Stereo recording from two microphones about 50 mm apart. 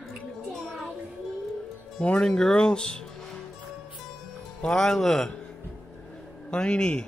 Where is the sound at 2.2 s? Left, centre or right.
Centre.